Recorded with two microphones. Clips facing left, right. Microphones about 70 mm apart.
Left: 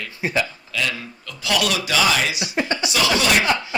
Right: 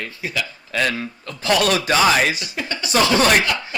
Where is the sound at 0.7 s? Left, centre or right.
Right.